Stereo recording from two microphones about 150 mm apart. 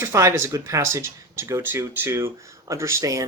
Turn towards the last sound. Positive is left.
turn(degrees=-20)  # may be behind; listen again after turning